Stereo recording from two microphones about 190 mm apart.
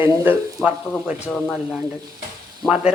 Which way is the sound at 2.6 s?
5° right (ahead or behind).